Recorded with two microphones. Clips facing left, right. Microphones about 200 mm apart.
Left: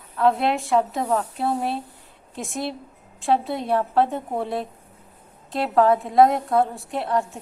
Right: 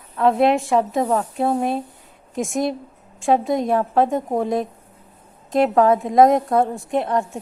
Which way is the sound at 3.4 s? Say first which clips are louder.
Right 7 dB; 45° right (ahead or behind).